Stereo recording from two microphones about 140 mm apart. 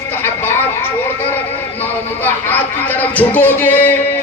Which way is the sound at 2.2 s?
15° left (ahead or behind).